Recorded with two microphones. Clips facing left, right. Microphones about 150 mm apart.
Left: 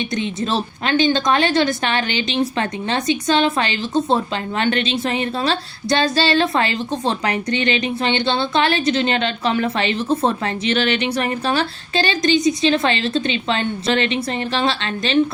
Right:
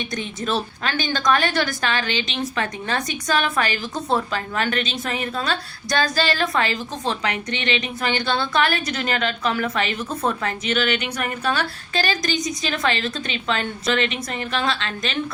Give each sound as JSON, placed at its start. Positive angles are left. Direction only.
{"t": 0.1, "sound": "a woman's voice", "side_deg": 25}